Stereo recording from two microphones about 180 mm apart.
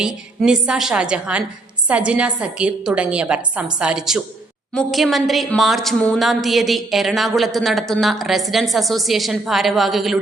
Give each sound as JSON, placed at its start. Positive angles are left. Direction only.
{"t": 0.0, "sound": "a woman's voice", "side_deg": -5}